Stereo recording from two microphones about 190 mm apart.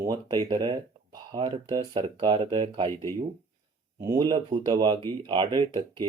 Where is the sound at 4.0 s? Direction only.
20° right (ahead or behind).